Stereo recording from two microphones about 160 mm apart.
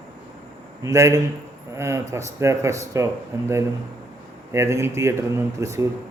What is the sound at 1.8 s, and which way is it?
Mantra, 15° right (ahead or behind).